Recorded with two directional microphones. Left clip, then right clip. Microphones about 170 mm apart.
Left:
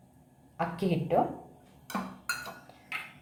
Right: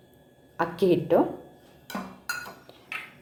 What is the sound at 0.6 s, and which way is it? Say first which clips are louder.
Speech: right 8 dB; 45° right (ahead or behind).